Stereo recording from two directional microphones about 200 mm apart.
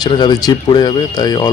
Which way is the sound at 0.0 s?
20° left (ahead or behind).